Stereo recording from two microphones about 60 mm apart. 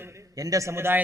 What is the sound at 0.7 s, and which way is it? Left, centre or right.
Speech, right.